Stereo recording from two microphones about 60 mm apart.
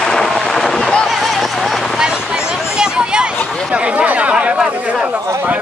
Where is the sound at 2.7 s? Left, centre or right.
Centre.